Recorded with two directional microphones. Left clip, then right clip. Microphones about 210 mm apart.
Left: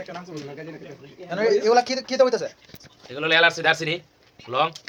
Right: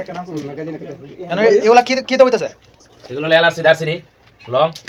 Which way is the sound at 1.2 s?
10° left (ahead or behind).